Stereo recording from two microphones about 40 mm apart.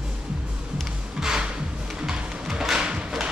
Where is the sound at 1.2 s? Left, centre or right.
Centre.